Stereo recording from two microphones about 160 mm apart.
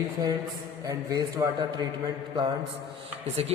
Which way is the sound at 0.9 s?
25° right (ahead or behind).